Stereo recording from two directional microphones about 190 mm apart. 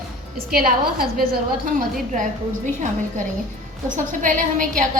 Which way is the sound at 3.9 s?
40° right (ahead or behind).